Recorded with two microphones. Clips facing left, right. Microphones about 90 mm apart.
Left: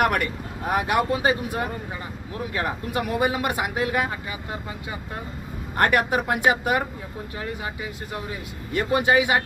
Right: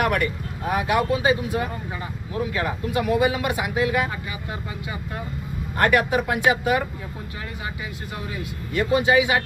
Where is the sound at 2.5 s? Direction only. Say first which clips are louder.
Even; 35° left (ahead or behind).